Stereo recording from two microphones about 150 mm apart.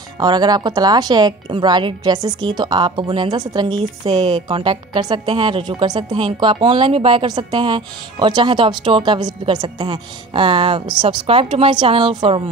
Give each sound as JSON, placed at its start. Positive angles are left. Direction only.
{"t": 0.2, "sound": "a woman's voice", "side_deg": -25}